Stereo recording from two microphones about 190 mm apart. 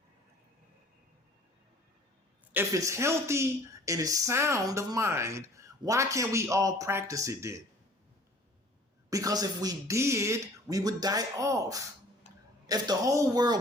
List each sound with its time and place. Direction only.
2.5 s speech: 15° right (ahead or behind)
9.0 s a woman's voice: 20° right (ahead or behind)